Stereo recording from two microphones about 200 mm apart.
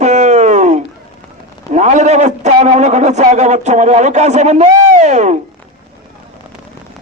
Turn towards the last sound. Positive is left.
turn(degrees=-35)  # may be behind; listen again after turning